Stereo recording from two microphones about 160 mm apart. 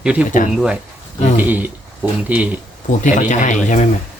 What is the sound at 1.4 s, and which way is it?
Speech, 10° right (ahead or behind).